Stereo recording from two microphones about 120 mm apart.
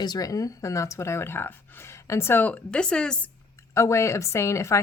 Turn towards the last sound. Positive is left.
turn(degrees=25)  # may be behind; listen again after turning